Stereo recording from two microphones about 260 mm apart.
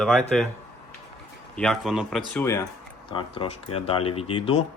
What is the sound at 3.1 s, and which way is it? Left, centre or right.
Speech, left.